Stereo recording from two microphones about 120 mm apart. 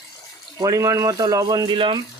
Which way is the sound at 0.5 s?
30° right (ahead or behind).